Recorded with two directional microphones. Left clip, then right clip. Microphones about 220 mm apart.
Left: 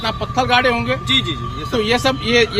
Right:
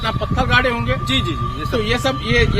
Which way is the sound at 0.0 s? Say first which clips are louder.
Left 2 dB; 25° left (ahead or behind).